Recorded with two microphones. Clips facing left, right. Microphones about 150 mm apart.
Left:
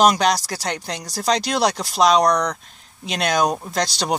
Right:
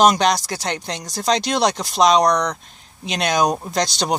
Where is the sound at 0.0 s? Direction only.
5° left (ahead or behind).